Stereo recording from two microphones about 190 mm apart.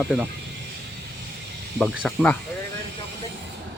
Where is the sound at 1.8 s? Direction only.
5° left (ahead or behind).